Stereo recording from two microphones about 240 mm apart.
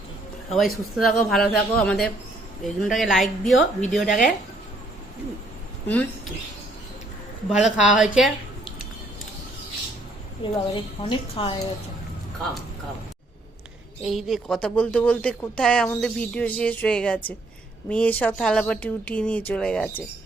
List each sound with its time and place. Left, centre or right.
0.5 s speech: centre
7.5 s speech: centre
10.4 s a woman's voice: left
14.0 s speech: centre